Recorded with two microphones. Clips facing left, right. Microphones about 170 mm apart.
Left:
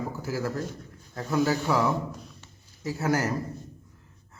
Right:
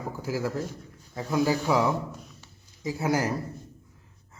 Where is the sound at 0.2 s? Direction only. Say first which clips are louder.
Right 3 dB; 15° right (ahead or behind).